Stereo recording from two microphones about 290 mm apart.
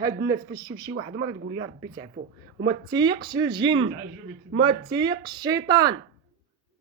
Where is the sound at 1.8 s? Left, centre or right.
Centre.